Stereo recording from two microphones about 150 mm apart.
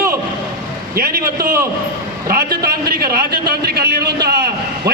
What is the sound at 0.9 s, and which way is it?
A man's voice, 85° right.